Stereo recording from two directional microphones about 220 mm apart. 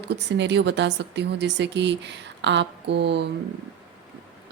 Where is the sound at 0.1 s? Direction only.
55° right (ahead or behind).